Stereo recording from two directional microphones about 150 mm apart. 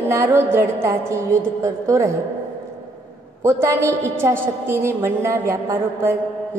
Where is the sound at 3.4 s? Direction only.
15° right (ahead or behind).